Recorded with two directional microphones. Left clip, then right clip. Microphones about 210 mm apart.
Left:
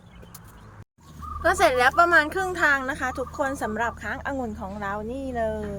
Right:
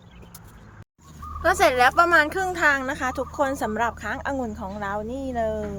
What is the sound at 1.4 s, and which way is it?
A woman's voice, 15° right (ahead or behind).